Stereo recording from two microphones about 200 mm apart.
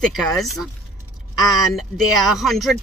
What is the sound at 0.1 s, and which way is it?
Speech, centre (ahead or behind).